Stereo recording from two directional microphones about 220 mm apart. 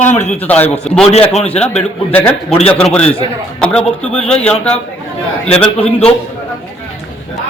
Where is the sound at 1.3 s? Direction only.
30° left (ahead or behind).